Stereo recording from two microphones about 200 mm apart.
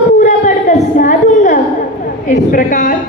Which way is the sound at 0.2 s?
40° left (ahead or behind).